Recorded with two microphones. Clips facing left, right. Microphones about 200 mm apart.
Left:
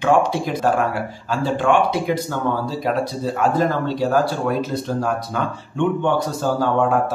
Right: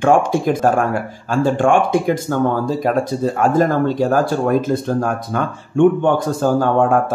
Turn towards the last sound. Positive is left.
turn(degrees=-50)  # may be behind; listen again after turning